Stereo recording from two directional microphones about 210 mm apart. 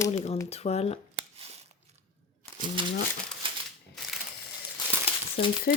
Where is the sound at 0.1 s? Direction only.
30° left (ahead or behind).